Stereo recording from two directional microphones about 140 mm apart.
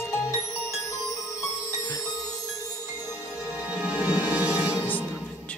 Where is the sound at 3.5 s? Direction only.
10° right (ahead or behind).